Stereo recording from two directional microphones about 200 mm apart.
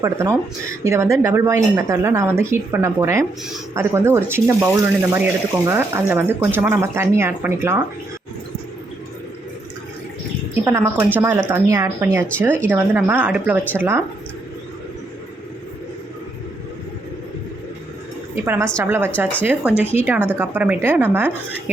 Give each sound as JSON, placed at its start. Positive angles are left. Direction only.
{"t": 0.0, "sound": "speech", "side_deg": -15}
{"t": 10.6, "sound": "speech", "side_deg": -15}
{"t": 18.4, "sound": "speech", "side_deg": -10}